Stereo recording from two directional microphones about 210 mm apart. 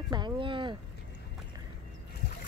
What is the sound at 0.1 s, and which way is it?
Speech, 20° right (ahead or behind).